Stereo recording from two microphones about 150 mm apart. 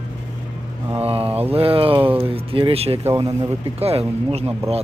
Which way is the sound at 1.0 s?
40° right (ahead or behind).